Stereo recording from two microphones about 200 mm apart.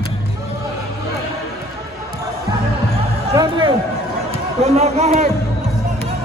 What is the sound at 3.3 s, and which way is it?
Music, 20° right (ahead or behind).